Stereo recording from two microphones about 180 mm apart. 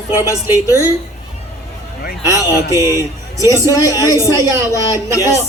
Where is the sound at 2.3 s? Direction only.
15° right (ahead or behind).